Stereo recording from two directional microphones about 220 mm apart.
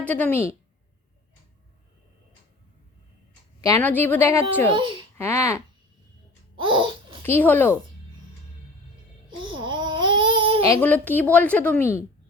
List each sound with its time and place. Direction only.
0.0 s a woman's voice: 5° left (ahead or behind)
3.6 s a woman's voice: 10° left (ahead or behind)
4.7 s a child's voice: 25° right (ahead or behind)
5.1 s a woman's voice: 10° left (ahead or behind)
6.6 s babbling: 20° right (ahead or behind)
7.2 s a woman's voice: 10° left (ahead or behind)
9.4 s babbling: 20° right (ahead or behind)
10.7 s a woman's voice: 10° left (ahead or behind)